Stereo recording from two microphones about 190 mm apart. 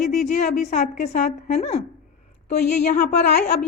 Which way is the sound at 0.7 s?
40° left (ahead or behind).